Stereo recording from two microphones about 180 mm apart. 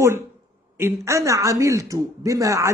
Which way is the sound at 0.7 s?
15° right (ahead or behind).